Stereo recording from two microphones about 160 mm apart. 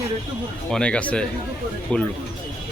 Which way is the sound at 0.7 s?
5° left (ahead or behind).